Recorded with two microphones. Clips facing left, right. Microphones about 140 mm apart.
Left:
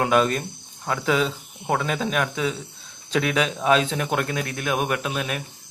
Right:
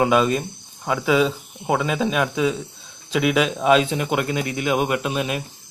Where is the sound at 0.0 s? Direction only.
5° right (ahead or behind).